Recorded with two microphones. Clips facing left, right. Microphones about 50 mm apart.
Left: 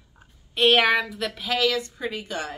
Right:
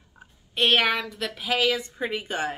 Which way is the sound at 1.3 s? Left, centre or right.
Centre.